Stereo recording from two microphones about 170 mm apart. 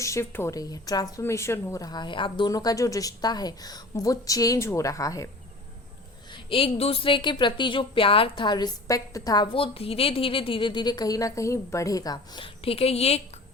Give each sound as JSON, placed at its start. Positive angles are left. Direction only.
{"t": 0.0, "sound": "speech", "side_deg": 15}
{"t": 6.3, "sound": "speech", "side_deg": 35}